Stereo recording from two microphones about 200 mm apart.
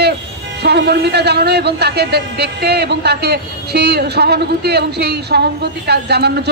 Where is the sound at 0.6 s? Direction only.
55° right (ahead or behind).